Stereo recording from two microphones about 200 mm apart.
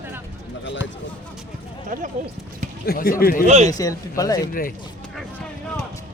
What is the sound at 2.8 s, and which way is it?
Speech, 50° left (ahead or behind).